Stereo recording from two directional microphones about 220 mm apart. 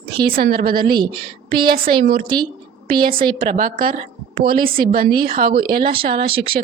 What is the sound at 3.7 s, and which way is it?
A woman's voice, 40° right (ahead or behind).